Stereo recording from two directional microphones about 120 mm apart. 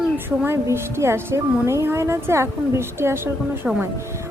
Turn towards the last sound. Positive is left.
turn(degrees=-20)  # may be behind; listen again after turning